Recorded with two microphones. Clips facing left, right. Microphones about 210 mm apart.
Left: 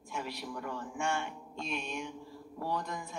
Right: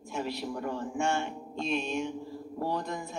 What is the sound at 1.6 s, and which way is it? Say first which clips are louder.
Speech: right 8 dB; 25° right (ahead or behind).